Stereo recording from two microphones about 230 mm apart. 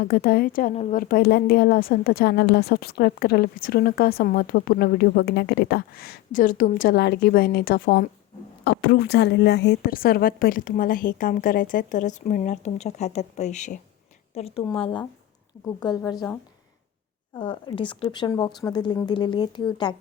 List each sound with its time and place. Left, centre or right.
0.0 s a woman's voice: left; by 16.2 s centre
17.3 s a woman's voice: left